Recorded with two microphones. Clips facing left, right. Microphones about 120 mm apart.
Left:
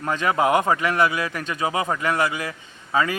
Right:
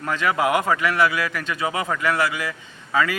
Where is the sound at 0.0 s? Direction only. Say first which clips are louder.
Left 1 dB; 25° left (ahead or behind).